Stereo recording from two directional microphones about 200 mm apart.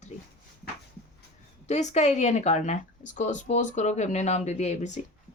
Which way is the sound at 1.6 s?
35° left (ahead or behind).